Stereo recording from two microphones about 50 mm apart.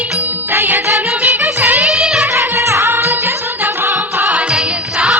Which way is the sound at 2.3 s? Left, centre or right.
Right.